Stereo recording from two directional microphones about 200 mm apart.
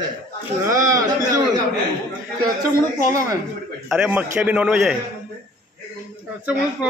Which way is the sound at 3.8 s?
5° right (ahead or behind).